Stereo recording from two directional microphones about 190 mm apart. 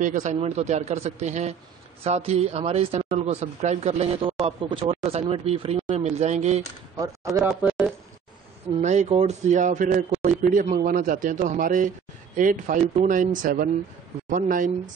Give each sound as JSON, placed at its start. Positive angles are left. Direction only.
{"t": 0.0, "sound": "a man's voice", "side_deg": -40}
{"t": 7.0, "sound": "speech", "side_deg": -15}
{"t": 7.4, "sound": "a sound", "side_deg": -5}
{"t": 8.8, "sound": "a man's voice", "side_deg": -35}